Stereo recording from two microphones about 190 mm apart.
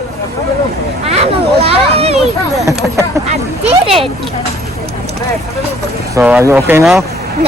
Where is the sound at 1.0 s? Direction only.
35° right (ahead or behind).